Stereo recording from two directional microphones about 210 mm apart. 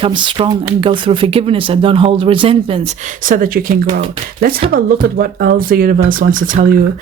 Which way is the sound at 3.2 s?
40° right (ahead or behind).